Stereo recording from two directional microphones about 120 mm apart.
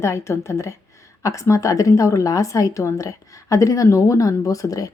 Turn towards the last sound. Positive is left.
turn(degrees=30)  # may be behind; listen again after turning